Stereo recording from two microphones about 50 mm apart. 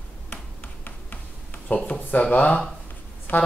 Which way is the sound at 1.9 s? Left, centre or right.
Left.